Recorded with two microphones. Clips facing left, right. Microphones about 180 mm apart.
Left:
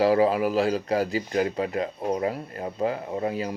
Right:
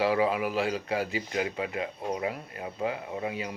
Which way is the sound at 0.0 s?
40° left (ahead or behind).